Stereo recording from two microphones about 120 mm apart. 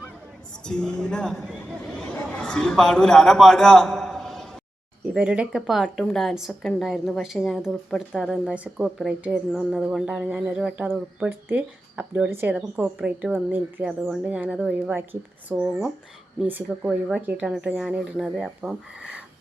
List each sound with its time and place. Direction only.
0.6 s speech: 5° left (ahead or behind); by 15.5 s 15° right (ahead or behind)
16.6 s speech: 5° right (ahead or behind)